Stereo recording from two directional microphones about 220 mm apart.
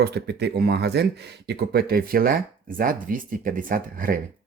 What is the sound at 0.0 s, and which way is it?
Speech, 45° right (ahead or behind).